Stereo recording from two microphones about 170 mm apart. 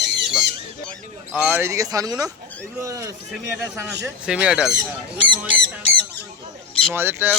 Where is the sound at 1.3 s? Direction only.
5° right (ahead or behind).